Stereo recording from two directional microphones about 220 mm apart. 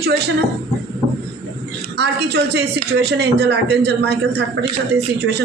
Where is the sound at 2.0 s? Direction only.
50° right (ahead or behind).